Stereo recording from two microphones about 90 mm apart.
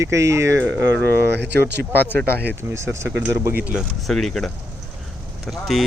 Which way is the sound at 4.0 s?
Centre (ahead or behind).